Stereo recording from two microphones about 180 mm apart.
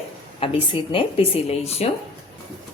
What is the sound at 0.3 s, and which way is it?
Speech, 30° left (ahead or behind).